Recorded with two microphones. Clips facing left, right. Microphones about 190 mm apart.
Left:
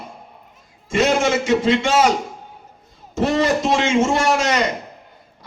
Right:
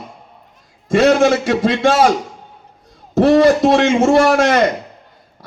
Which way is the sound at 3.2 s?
60° right (ahead or behind).